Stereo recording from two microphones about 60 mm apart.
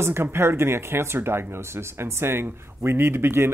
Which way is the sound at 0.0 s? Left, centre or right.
Right.